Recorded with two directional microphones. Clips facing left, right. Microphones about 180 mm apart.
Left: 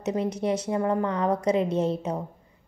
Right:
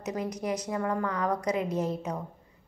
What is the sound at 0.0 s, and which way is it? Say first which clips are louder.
A woman's voice: left 6 dB; 25° left (ahead or behind).